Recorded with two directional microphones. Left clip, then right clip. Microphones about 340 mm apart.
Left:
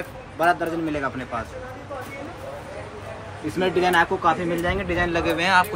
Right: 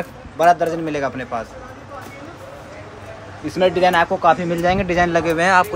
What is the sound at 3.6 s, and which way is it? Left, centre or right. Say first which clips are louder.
Speech: right 5 dB; right.